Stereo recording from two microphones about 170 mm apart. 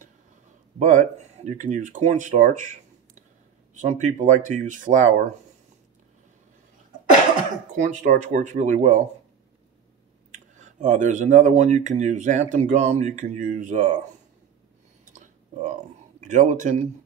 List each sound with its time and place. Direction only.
0.7 s speech: 45° right (ahead or behind)
7.7 s speech: 45° right (ahead or behind)
10.3 s speech: 45° right (ahead or behind)
15.1 s a sound: 45° right (ahead or behind)